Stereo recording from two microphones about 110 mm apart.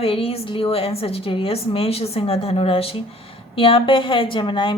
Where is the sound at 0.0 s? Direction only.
60° left (ahead or behind).